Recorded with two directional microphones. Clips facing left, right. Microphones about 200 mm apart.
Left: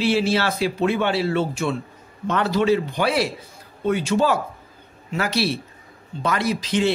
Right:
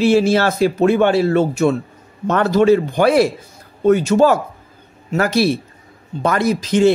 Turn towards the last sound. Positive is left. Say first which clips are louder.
# right 7 dB
turn(degrees=-45)  # may be behind; listen again after turning